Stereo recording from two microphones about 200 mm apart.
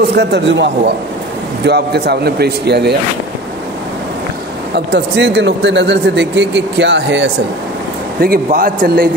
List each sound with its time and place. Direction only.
0.1 s speech: 55° right (ahead or behind)
1.7 s speech: 55° right (ahead or behind)
4.7 s speech: 60° right (ahead or behind)
8.2 s a man's voice: 45° right (ahead or behind)